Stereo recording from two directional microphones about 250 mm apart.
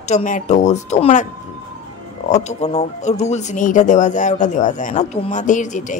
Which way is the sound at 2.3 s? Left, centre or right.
Left.